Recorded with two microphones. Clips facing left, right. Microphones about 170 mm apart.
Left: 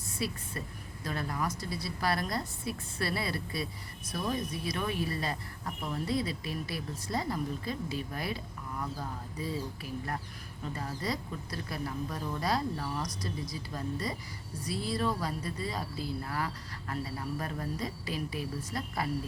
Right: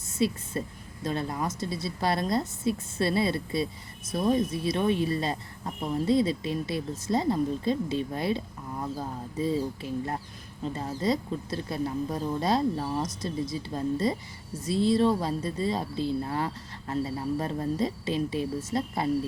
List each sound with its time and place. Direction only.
0.1 s a woman's voice: 25° right (ahead or behind)